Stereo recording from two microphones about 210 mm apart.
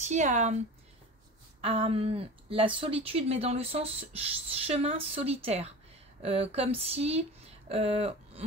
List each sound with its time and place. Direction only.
0.0 s speech: 35° right (ahead or behind)
1.6 s a woman's voice: 30° right (ahead or behind)